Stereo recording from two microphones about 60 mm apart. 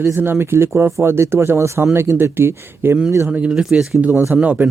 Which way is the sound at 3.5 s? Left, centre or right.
Centre.